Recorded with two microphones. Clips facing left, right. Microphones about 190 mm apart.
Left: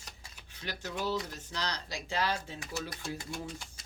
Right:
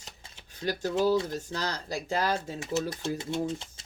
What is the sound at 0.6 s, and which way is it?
Speech, 40° right (ahead or behind).